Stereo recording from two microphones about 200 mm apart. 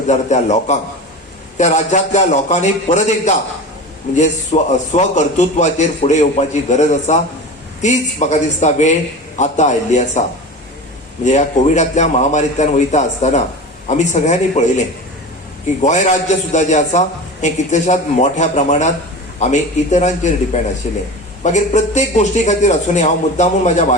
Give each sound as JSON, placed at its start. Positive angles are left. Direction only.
{"t": 0.1, "sound": "a man's voice", "side_deg": 35}
{"t": 11.3, "sound": "a man's voice", "side_deg": 35}